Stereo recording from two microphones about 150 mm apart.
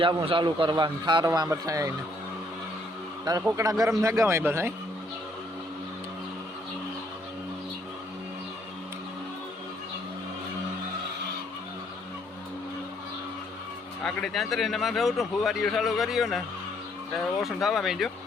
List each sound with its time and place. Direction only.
0.0 s a man's voice: 35° right (ahead or behind)
3.5 s a man's voice: 20° right (ahead or behind)
14.0 s a man's voice: 5° left (ahead or behind)